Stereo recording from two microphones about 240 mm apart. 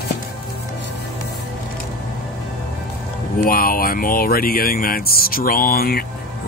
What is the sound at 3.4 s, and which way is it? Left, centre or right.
Speech, left.